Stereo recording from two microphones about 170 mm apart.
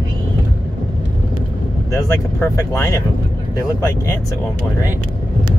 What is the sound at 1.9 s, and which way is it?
Speech, 15° left (ahead or behind).